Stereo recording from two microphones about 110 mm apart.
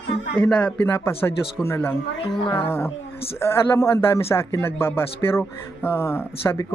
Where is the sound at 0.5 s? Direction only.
15° left (ahead or behind).